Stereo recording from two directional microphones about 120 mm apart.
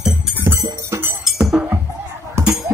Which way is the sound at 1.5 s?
20° right (ahead or behind).